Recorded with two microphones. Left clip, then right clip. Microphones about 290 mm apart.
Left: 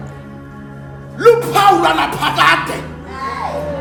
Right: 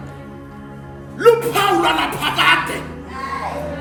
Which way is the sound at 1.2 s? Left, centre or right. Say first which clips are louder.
Left 4 dB; centre.